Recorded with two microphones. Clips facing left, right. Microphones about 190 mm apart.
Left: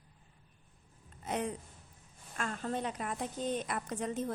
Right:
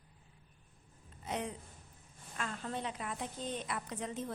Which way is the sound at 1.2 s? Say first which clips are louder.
Left 3 dB; 50° left (ahead or behind).